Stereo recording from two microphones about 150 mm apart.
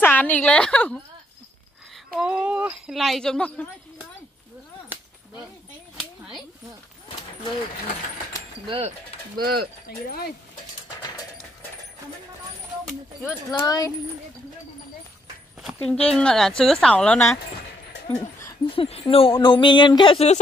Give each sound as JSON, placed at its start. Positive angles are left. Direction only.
{"t": 0.0, "sound": "a woman's voice", "side_deg": 10}
{"t": 2.1, "sound": "speech", "side_deg": -5}
{"t": 5.9, "sound": "a sound", "side_deg": -5}
{"t": 8.6, "sound": "speech", "side_deg": -40}
{"t": 9.4, "sound": "speech", "side_deg": -90}
{"t": 9.8, "sound": "speech", "side_deg": 90}
{"t": 12.8, "sound": "speech", "side_deg": 0}
{"t": 13.6, "sound": "speech", "side_deg": 25}
{"t": 15.6, "sound": "speech", "side_deg": 5}
{"t": 18.7, "sound": "a sound", "side_deg": 40}